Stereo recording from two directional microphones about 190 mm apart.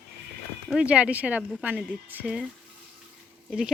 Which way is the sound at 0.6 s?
5° right (ahead or behind).